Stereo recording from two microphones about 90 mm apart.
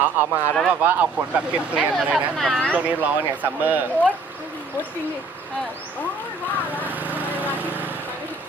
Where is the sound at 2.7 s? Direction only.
15° right (ahead or behind).